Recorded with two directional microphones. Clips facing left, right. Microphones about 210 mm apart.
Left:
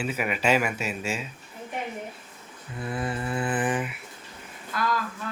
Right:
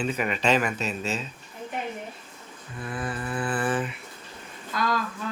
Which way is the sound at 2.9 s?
25° left (ahead or behind).